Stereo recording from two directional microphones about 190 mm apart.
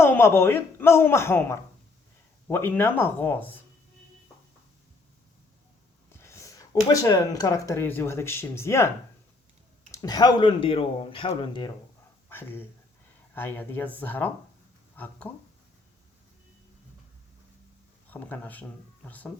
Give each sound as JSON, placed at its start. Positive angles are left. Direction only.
{"t": 0.0, "sound": "speech", "side_deg": 10}
{"t": 6.1, "sound": "a sound", "side_deg": 15}
{"t": 6.8, "sound": "speech", "side_deg": 20}
{"t": 9.9, "sound": "speech", "side_deg": 20}
{"t": 12.3, "sound": "speech", "side_deg": 10}
{"t": 18.1, "sound": "speech", "side_deg": 10}